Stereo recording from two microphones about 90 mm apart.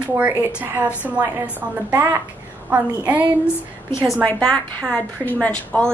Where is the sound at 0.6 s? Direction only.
20° right (ahead or behind).